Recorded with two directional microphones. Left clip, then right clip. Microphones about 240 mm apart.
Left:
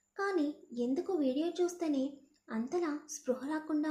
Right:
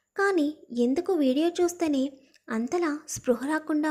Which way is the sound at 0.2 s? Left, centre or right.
Right.